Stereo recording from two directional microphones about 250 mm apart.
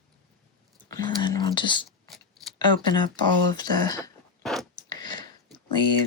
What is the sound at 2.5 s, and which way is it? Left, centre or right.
Speech, centre.